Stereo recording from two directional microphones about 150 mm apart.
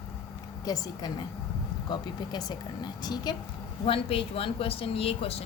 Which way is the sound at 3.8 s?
40° left (ahead or behind).